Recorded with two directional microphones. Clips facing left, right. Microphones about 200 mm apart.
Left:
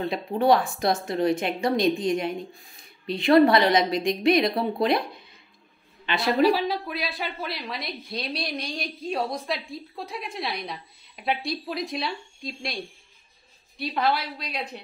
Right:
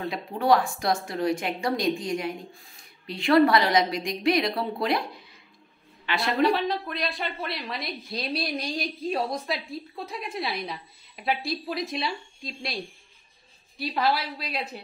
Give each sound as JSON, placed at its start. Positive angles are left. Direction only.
{"t": 0.1, "sound": "a woman's voice", "side_deg": 25}
{"t": 6.1, "sound": "a woman's voice", "side_deg": 25}
{"t": 6.4, "sound": "a woman's voice", "side_deg": 5}
{"t": 13.9, "sound": "a woman's voice", "side_deg": 0}